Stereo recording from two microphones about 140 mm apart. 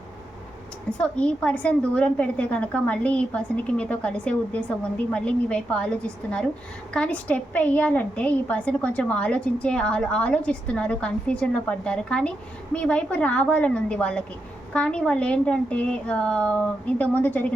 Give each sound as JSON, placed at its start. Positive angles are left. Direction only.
{"t": 0.9, "sound": "a woman's voice", "side_deg": 10}